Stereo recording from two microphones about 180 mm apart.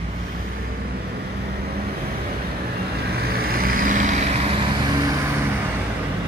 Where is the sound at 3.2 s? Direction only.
55° right (ahead or behind); by 5.3 s 20° right (ahead or behind).